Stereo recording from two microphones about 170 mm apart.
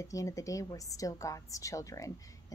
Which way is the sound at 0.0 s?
20° left (ahead or behind).